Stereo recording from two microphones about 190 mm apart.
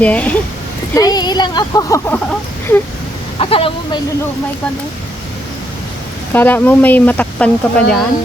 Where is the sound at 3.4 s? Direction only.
30° left (ahead or behind).